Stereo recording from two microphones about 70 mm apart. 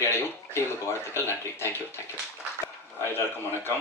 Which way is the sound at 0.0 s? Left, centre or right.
Left.